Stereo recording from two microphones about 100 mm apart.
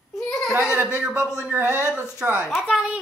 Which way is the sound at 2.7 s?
10° right (ahead or behind).